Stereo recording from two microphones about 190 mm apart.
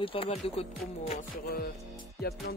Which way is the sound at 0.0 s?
30° left (ahead or behind).